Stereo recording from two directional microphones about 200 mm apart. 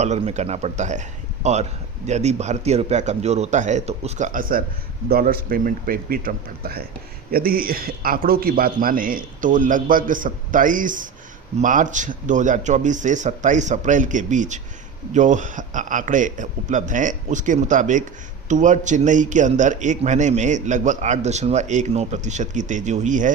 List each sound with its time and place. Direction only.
0.0 s a man's voice: 35° right (ahead or behind)